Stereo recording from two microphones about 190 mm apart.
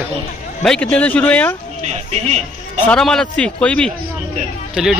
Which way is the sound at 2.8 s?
5° left (ahead or behind).